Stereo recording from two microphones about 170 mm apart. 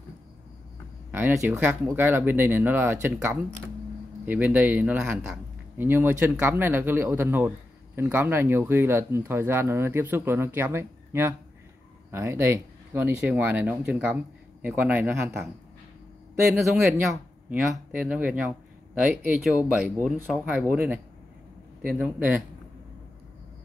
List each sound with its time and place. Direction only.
1.1 s a man's voice: 15° right (ahead or behind)
16.5 s speech: centre (ahead or behind)
16.8 s a man's voice: 15° right (ahead or behind)